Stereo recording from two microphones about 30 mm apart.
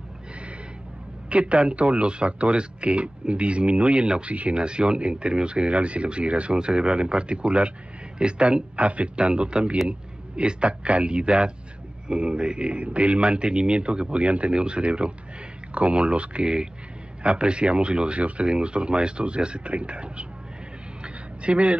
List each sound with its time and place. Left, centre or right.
1.3 s speech: right
4.6 s speech: right
8.8 s a man's voice: right
12.8 s speech: right
14.2 s speech: right
14.5 s speech: right
21.0 s a sound: right